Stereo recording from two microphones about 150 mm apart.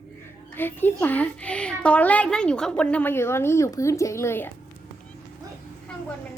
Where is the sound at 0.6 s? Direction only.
15° left (ahead or behind).